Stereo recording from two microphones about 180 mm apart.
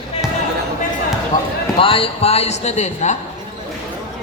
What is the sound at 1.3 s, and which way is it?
Speech, 20° left (ahead or behind).